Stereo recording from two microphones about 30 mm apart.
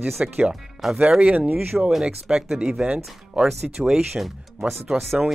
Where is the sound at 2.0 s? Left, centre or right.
Right.